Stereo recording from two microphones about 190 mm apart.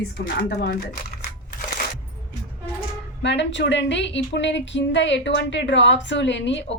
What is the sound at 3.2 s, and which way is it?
A woman's voice, 70° left (ahead or behind).